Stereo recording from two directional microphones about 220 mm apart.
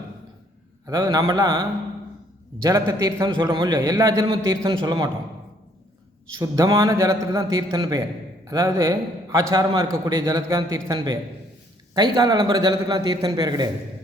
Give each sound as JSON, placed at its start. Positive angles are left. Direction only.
{"t": 0.9, "sound": "a man's voice", "side_deg": -15}
{"t": 6.4, "sound": "a man's voice", "side_deg": -15}